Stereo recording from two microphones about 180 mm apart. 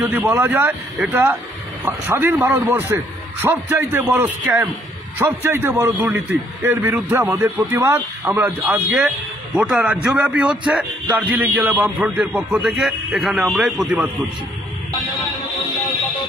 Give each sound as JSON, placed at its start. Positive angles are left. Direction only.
{"t": 0.0, "sound": "a man's voice", "side_deg": -10}